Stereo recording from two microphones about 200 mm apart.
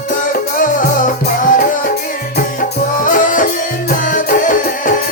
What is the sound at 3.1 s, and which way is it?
Music, 40° left (ahead or behind).